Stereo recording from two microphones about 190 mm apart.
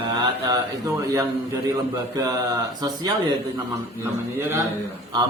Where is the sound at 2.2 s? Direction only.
20° right (ahead or behind).